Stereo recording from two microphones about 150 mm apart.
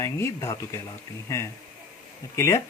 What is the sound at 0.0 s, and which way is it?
Speech, 20° left (ahead or behind).